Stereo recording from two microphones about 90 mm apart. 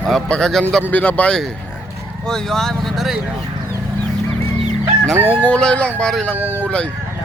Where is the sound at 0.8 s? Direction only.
15° left (ahead or behind); by 3.1 s centre (ahead or behind).